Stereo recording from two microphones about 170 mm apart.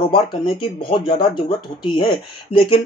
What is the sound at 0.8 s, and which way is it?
Speech, 30° left (ahead or behind).